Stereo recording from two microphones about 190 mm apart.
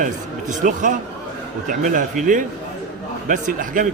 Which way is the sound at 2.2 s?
45° right (ahead or behind).